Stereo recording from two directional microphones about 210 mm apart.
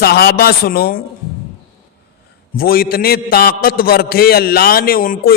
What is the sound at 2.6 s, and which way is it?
A man's voice, 45° left (ahead or behind).